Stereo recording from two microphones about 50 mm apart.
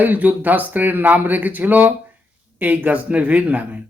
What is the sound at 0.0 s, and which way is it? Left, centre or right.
Speech, right.